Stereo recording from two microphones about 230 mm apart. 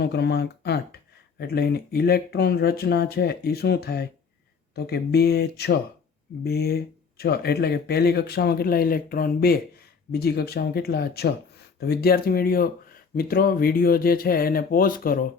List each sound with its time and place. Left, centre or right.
0.0 s speech: left